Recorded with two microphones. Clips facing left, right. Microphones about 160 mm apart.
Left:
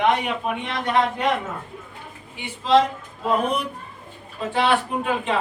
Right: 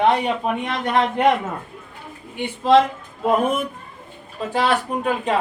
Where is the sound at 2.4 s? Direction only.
55° right (ahead or behind).